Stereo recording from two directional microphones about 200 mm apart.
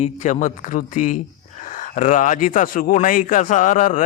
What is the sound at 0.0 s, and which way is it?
Speech, 35° left (ahead or behind).